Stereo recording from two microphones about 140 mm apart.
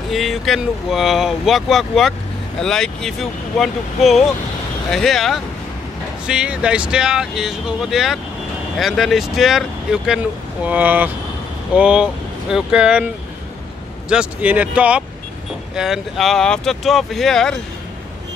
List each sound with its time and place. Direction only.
0.1 s speech: centre (ahead or behind)